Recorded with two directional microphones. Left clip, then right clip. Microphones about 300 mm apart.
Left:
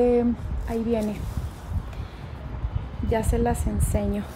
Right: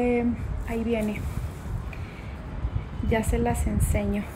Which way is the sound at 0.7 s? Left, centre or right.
Centre.